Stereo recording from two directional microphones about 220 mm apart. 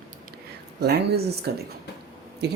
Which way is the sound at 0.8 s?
45° right (ahead or behind).